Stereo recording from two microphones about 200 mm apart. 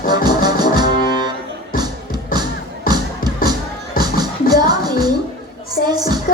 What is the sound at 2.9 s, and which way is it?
Music, 45° left (ahead or behind).